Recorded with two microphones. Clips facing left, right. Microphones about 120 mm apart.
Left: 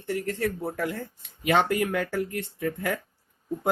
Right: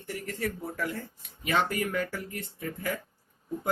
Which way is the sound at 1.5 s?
65° left (ahead or behind).